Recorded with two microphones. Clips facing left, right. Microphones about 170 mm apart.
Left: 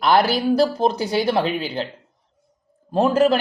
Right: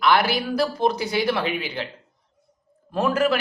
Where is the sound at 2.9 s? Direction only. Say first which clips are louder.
Left 4 dB; 30° left (ahead or behind).